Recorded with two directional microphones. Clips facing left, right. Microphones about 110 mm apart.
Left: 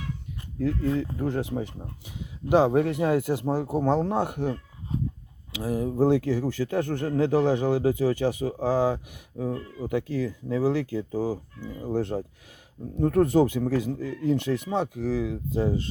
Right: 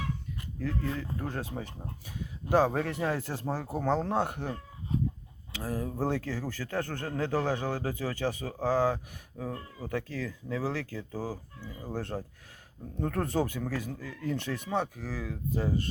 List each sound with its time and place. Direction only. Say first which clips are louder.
0.6 s speech: left 8 dB; 20° left (ahead or behind)